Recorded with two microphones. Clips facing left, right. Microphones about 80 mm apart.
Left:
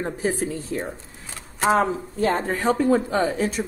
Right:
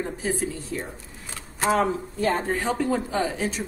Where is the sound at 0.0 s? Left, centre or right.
Left.